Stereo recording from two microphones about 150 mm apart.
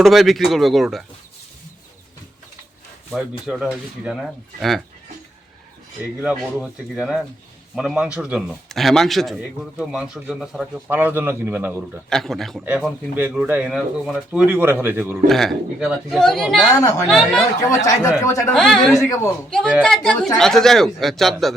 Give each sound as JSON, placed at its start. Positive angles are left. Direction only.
{"t": 0.0, "sound": "a man's voice", "side_deg": 0}
{"t": 3.1, "sound": "a man's voice", "side_deg": -5}
{"t": 6.2, "sound": "a man's voice", "side_deg": -5}
{"t": 12.0, "sound": "a man's voice", "side_deg": 0}
{"t": 12.6, "sound": "speech", "side_deg": -10}
{"t": 15.3, "sound": "a man's voice", "side_deg": 0}
{"t": 17.7, "sound": "a man's voice", "side_deg": 20}
{"t": 18.5, "sound": "a man's voice", "side_deg": 5}
{"t": 18.9, "sound": "a man's voice", "side_deg": 20}
{"t": 19.5, "sound": "a man's voice", "side_deg": 5}